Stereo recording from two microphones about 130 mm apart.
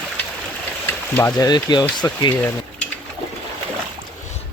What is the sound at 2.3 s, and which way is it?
Speech, 15° left (ahead or behind).